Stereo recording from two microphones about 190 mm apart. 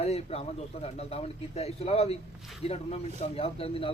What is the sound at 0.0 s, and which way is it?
Speech, 35° left (ahead or behind).